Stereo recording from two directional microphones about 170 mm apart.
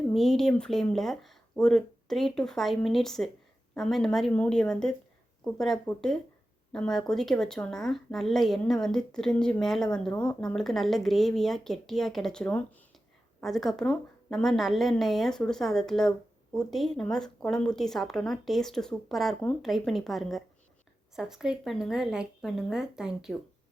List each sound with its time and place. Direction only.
0.1 s a woman's voice: centre (ahead or behind)